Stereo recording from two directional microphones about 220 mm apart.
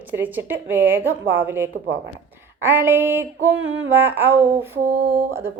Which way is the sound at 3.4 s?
65° right (ahead or behind).